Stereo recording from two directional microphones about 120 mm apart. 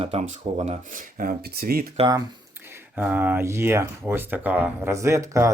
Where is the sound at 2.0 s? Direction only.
60° right (ahead or behind).